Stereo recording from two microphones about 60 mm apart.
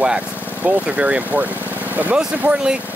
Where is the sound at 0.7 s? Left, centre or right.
Centre.